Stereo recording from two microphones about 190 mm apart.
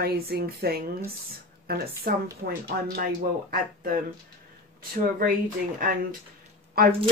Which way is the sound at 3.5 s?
50° right (ahead or behind).